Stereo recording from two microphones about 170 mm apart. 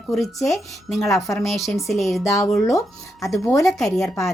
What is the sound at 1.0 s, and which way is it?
Speech, 20° left (ahead or behind).